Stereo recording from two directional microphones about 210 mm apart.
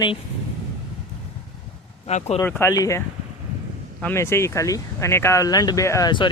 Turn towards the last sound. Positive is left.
turn(degrees=20)  # may be behind; listen again after turning